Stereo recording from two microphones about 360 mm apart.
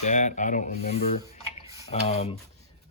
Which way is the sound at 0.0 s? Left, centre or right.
Centre.